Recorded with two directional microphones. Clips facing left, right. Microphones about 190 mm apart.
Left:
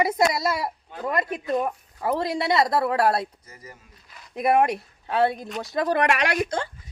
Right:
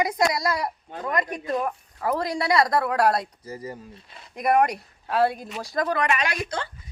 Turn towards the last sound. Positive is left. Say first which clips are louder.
# left 3 dB
turn(degrees=75)  # may be behind; listen again after turning